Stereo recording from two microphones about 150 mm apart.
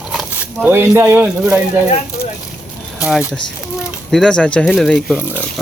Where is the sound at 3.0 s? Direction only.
10° right (ahead or behind).